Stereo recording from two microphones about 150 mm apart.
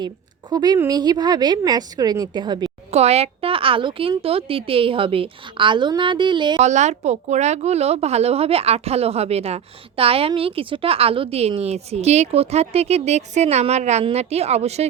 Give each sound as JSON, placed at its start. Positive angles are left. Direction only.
{"t": 0.5, "sound": "a woman's voice", "side_deg": -25}
{"t": 2.9, "sound": "a woman's voice", "side_deg": -45}
{"t": 6.6, "sound": "a woman's voice", "side_deg": -50}